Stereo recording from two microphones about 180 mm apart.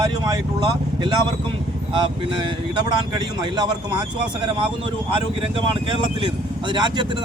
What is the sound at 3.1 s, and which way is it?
Speech, 25° right (ahead or behind).